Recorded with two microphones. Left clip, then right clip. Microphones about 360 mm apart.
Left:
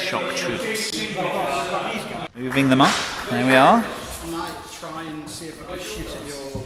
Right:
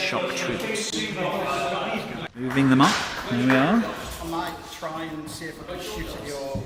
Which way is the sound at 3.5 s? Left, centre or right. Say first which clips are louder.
Left 7 dB; left.